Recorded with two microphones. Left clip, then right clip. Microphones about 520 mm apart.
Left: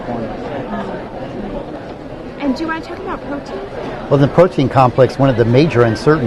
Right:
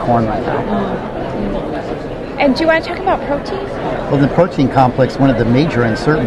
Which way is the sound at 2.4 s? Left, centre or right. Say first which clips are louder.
Right 8 dB; right.